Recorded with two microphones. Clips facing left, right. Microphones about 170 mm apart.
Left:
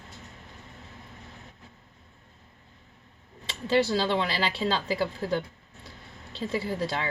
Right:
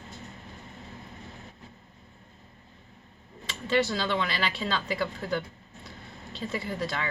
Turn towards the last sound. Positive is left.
turn(degrees=30)  # may be behind; listen again after turning